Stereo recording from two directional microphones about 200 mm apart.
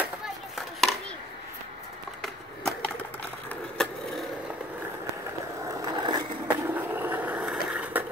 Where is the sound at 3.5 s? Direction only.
Centre (ahead or behind).